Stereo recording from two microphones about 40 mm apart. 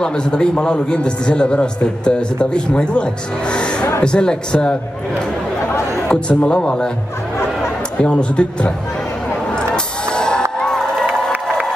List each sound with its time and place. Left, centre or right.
0.0 s a man's voice: left
6.4 s a man's voice: left
8.0 s a man's voice: left
10.1 s music: centre